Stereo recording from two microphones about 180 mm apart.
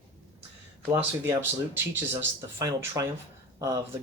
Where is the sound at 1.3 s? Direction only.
15° right (ahead or behind).